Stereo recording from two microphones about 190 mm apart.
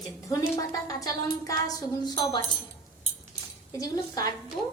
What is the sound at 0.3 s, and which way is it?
A woman's voice, 15° left (ahead or behind).